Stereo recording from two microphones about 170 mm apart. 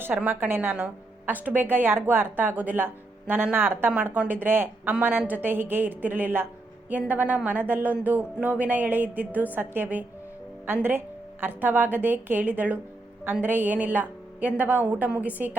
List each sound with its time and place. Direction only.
0.0 s speech: 10° right (ahead or behind)